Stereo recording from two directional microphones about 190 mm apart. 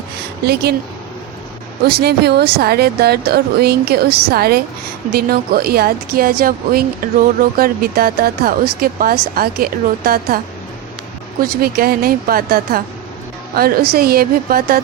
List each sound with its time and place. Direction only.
0.4 s a woman's voice: 55° right (ahead or behind)
1.9 s a woman's voice: 55° right (ahead or behind)
11.4 s speech: 50° right (ahead or behind)